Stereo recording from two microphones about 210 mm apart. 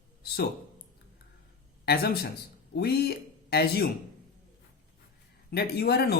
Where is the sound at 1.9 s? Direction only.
45° left (ahead or behind).